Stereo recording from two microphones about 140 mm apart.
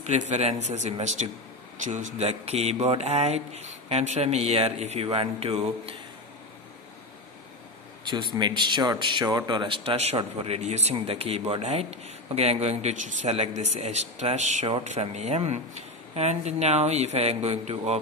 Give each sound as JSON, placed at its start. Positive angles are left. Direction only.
{"t": 0.0, "sound": "speech", "side_deg": -55}
{"t": 8.1, "sound": "speech", "side_deg": -35}